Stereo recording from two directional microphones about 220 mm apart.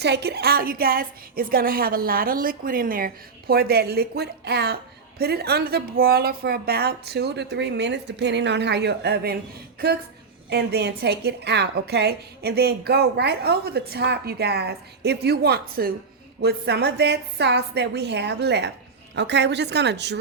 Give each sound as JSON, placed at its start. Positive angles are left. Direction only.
{"t": 0.0, "sound": "a woman's voice", "side_deg": -50}